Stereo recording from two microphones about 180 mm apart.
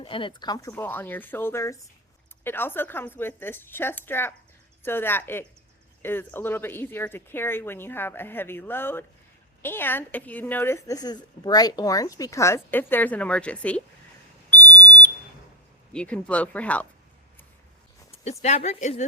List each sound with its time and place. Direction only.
0.0 s speech: 30° left (ahead or behind)
0.7 s a woman's voice: 10° left (ahead or behind)
14.5 s whistle: 10° left (ahead or behind)
15.9 s a woman's voice: 5° left (ahead or behind)
18.1 s speech: 40° left (ahead or behind)